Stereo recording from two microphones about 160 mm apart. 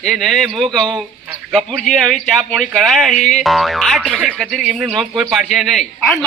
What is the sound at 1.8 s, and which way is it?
Speech, centre (ahead or behind).